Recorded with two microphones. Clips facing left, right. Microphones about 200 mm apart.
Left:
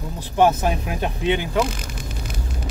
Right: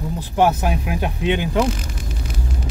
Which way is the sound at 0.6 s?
10° right (ahead or behind).